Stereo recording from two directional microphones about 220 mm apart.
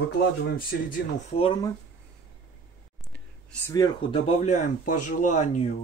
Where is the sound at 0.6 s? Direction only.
40° left (ahead or behind).